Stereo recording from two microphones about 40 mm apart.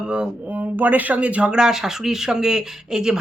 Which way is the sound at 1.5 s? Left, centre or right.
Centre.